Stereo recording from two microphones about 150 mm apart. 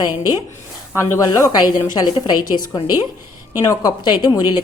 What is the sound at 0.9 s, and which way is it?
Speech, 20° left (ahead or behind).